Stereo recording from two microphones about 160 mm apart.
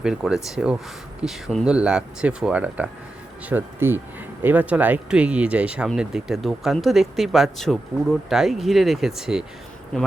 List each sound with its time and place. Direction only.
0.0 s speech: 5° right (ahead or behind)